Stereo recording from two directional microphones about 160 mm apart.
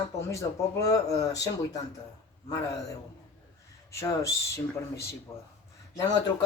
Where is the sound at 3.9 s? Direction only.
20° left (ahead or behind).